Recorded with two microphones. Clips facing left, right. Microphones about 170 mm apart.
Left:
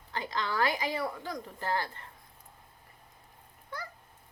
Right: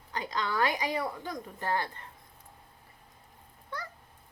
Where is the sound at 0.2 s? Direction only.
20° right (ahead or behind).